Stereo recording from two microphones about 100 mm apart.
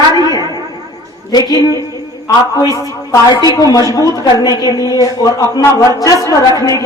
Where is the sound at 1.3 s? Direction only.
45° left (ahead or behind).